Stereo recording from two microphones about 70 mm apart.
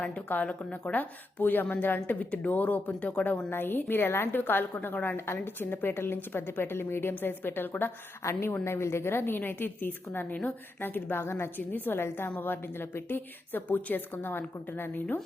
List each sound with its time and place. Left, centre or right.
0.4 s a woman's voice: centre
3.5 s a woman's voice: left
8.2 s a woman's voice: left